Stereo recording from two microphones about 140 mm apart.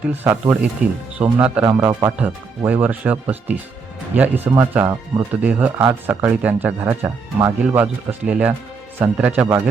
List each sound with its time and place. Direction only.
0.0 s speech: 15° right (ahead or behind)
1.9 s speech: 25° right (ahead or behind)
2.6 s speech: 10° right (ahead or behind)